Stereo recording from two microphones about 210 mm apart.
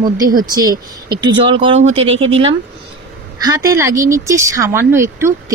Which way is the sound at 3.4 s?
15° right (ahead or behind).